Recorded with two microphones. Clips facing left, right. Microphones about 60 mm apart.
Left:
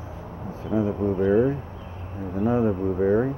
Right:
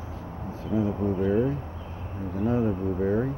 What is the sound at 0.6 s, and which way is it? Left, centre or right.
Speech, left.